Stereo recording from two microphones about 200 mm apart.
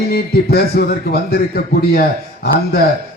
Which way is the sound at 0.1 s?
50° left (ahead or behind).